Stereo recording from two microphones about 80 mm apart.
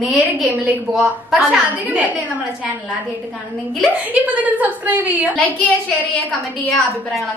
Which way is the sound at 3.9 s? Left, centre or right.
Centre.